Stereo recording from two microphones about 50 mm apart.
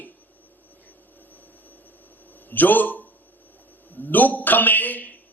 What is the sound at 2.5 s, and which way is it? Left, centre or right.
Speech, left.